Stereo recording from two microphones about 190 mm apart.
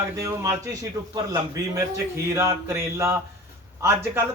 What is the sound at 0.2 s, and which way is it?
A man's voice, 15° right (ahead or behind).